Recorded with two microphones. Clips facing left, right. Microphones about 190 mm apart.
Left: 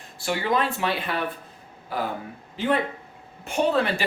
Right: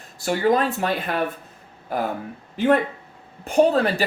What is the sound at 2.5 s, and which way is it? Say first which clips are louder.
Speech: right 5 dB; 45° right (ahead or behind).